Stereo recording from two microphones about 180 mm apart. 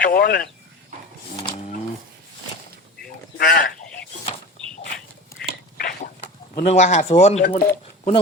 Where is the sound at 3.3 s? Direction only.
55° left (ahead or behind).